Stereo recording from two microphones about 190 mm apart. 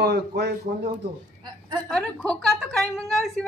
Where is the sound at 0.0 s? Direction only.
60° right (ahead or behind).